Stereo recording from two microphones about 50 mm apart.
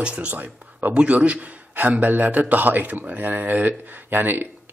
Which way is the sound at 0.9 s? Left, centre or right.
Right.